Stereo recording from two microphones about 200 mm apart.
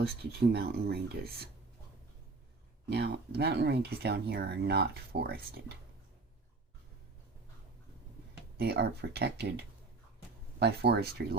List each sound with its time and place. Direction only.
0.2 s speech: 50° right (ahead or behind)
2.9 s speech: 55° right (ahead or behind)
8.5 s speech: 55° right (ahead or behind)
10.6 s speech: 55° right (ahead or behind)